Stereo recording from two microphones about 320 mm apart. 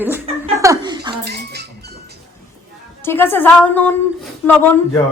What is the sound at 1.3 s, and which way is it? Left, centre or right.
Music, right.